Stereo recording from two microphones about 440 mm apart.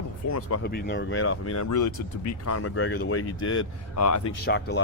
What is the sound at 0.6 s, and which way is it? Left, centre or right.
Speech, left.